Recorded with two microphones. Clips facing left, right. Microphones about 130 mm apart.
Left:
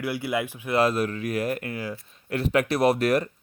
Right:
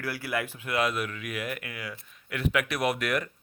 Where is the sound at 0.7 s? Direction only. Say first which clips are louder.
Left 6 dB; 35° left (ahead or behind).